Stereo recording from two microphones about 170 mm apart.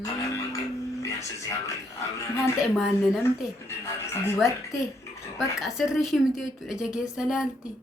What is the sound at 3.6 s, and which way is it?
Speech, 15° left (ahead or behind).